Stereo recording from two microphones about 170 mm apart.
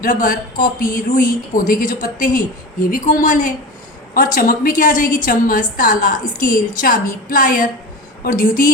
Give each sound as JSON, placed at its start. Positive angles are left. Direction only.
{"t": 0.0, "sound": "speech", "side_deg": 55}